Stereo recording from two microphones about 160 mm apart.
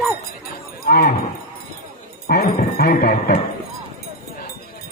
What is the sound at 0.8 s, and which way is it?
Speech, 75° left (ahead or behind).